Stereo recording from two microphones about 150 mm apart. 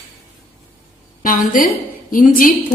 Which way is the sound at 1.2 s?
65° left (ahead or behind).